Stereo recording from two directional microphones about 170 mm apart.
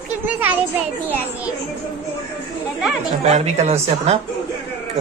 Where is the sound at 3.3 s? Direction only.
40° right (ahead or behind).